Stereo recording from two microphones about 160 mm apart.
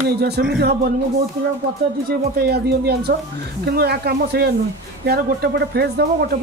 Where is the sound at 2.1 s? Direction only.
80° right.